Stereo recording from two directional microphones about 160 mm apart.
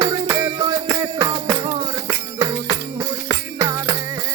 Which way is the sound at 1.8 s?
15° right (ahead or behind).